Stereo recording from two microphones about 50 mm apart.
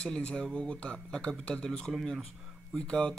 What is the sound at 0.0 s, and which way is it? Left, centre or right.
Speech, centre.